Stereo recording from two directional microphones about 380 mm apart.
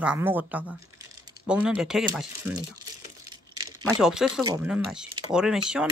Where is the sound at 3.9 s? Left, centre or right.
Centre.